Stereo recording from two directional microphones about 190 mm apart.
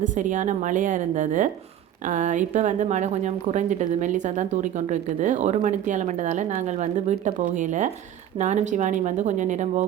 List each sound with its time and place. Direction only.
0.0 s a woman's voice: 40° right (ahead or behind)